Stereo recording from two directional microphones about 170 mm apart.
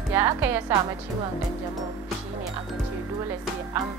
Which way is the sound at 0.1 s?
15° right (ahead or behind).